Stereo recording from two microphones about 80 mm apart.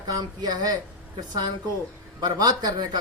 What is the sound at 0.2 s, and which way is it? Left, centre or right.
Speech, right.